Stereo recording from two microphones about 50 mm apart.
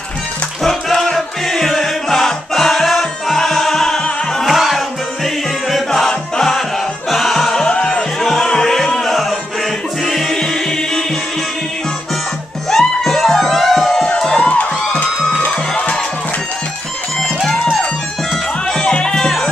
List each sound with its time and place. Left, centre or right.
0.7 s music: centre
4.5 s music: centre
7.6 s music: left
8.2 s music: centre
12.6 s music: centre
14.0 s crowd: centre
14.4 s music: left
17.2 s music: centre